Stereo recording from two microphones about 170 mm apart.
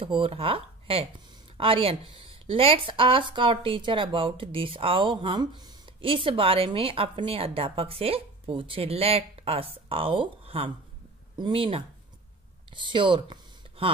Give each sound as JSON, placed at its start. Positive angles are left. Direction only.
{"t": 0.0, "sound": "speech", "side_deg": -30}